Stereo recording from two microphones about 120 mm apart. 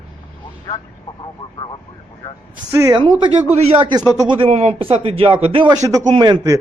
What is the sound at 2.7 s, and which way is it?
Speech, 30° right (ahead or behind).